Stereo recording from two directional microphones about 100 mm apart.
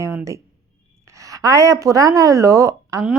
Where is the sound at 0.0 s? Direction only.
30° right (ahead or behind).